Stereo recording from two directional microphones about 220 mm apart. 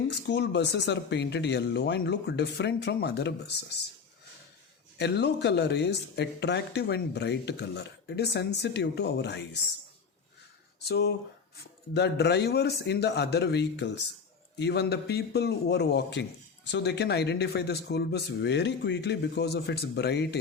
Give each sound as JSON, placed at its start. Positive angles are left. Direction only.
{"t": 0.1, "sound": "speech", "side_deg": 50}
{"t": 4.9, "sound": "speech", "side_deg": 50}
{"t": 10.8, "sound": "speech", "side_deg": 50}